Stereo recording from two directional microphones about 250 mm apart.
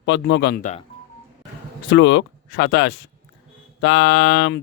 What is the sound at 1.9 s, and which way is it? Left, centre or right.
Speech, left.